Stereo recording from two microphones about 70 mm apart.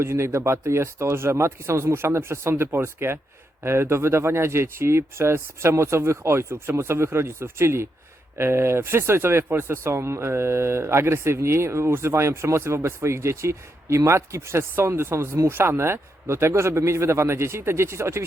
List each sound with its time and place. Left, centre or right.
0.0 s speech: right